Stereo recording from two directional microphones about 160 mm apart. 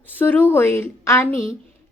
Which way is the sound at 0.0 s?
10° left (ahead or behind).